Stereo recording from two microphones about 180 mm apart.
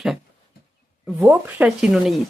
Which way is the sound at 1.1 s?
10° right (ahead or behind).